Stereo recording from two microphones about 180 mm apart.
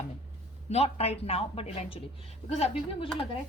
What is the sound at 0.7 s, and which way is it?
Speech, 35° left (ahead or behind).